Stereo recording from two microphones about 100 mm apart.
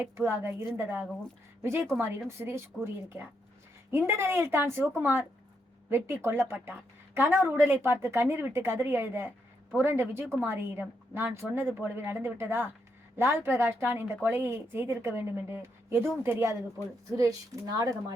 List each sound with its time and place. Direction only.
0.0 s a woman's voice: 20° right (ahead or behind); by 17.9 s 40° right (ahead or behind)